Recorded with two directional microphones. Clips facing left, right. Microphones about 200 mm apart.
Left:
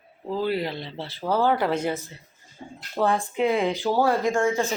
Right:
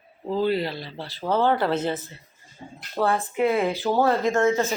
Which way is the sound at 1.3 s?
10° left (ahead or behind).